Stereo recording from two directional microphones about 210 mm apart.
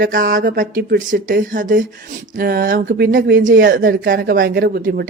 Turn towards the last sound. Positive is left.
turn(degrees=-45)  # may be behind; listen again after turning